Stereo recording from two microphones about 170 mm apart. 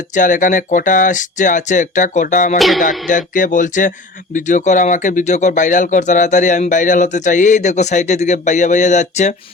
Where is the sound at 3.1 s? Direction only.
50° left (ahead or behind).